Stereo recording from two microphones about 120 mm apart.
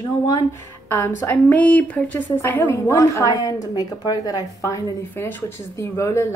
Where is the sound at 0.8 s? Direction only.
20° left (ahead or behind).